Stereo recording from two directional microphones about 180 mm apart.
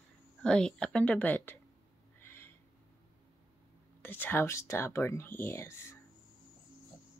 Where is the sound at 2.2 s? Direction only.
10° left (ahead or behind).